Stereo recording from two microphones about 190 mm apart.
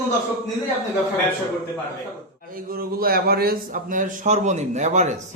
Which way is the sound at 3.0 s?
50° right (ahead or behind).